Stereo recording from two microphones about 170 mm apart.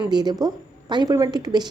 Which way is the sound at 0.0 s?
25° right (ahead or behind).